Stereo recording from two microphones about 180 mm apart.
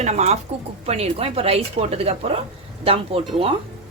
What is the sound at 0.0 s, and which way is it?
A woman's voice, 40° right (ahead or behind).